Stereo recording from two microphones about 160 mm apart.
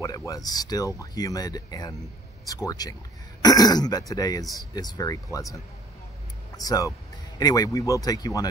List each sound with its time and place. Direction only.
0.0 s speech: 20° left (ahead or behind)